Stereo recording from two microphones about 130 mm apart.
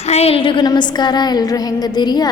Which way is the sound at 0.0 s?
55° left (ahead or behind).